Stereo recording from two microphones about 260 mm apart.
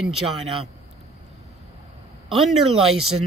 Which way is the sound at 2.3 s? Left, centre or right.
Centre.